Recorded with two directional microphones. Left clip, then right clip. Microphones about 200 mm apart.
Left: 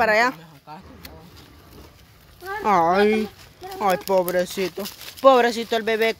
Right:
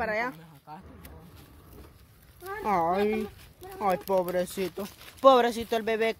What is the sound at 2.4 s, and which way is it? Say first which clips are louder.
Speech: left 8 dB; 10° left (ahead or behind).